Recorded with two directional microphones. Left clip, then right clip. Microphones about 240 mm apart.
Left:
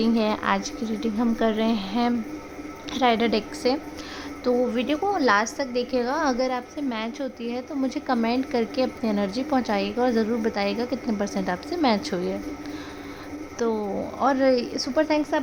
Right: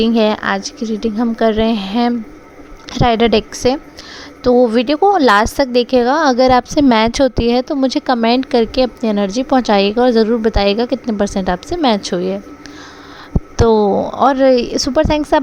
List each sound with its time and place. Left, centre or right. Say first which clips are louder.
0.0 s a woman's voice: right 10 dB; right
13.6 s a woman's voice: right 15 dB; right